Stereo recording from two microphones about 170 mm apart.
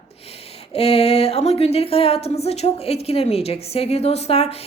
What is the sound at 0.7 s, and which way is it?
A woman's voice, 35° left (ahead or behind).